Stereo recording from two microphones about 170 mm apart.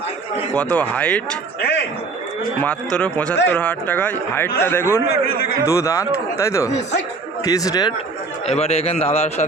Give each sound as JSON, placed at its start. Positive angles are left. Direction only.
{"t": 0.5, "sound": "speech", "side_deg": 10}
{"t": 1.6, "sound": "a sound", "side_deg": 80}
{"t": 2.6, "sound": "speech", "side_deg": 5}
{"t": 5.0, "sound": "a man's voice", "side_deg": 65}
{"t": 5.6, "sound": "speech", "side_deg": 20}
{"t": 8.4, "sound": "a man's voice", "side_deg": 35}